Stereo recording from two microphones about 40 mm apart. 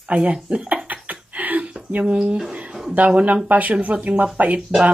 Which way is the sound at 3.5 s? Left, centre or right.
Right.